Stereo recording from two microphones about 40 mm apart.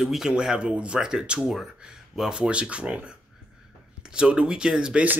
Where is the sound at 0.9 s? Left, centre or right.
Centre.